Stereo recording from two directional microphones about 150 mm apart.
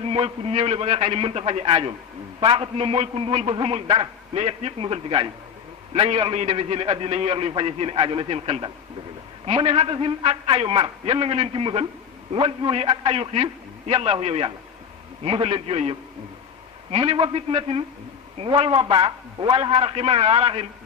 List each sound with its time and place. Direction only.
0.0 s a man's voice: 40° right (ahead or behind)